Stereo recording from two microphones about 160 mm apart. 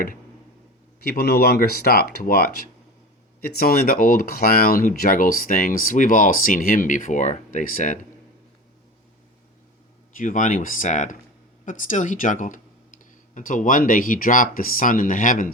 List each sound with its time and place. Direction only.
1.0 s speech: 75° left (ahead or behind); by 8.0 s 55° left (ahead or behind)
10.2 s speech: 55° left (ahead or behind)